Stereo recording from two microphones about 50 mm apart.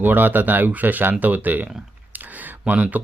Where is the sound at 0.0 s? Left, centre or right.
Right.